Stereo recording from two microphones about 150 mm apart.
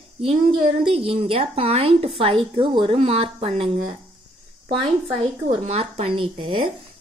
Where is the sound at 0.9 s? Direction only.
40° right (ahead or behind).